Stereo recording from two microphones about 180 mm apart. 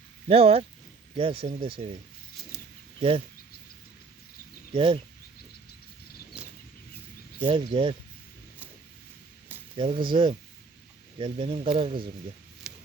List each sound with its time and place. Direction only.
0.3 s speech: 30° right (ahead or behind)
3.0 s speech: 30° right (ahead or behind)
4.7 s speech: 30° right (ahead or behind)
7.4 s speech: 25° right (ahead or behind)
9.7 s speech: 30° right (ahead or behind)
12.7 s a sound: 5° right (ahead or behind)